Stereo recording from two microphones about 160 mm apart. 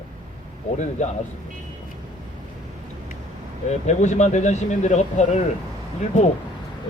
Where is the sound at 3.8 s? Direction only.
45° left (ahead or behind).